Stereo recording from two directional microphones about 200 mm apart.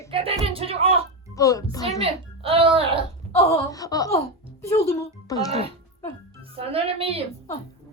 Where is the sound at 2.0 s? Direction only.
30° right (ahead or behind).